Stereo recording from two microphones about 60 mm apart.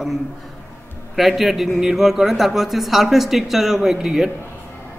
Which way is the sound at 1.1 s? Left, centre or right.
Centre.